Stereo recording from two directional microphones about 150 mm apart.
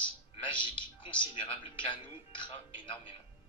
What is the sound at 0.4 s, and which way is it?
A man's voice, 35° left (ahead or behind).